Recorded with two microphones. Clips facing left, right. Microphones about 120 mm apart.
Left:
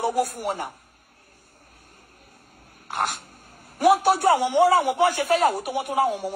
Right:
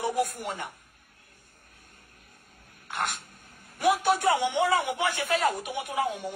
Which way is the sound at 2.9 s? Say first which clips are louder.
Left 5 dB; 35° left (ahead or behind).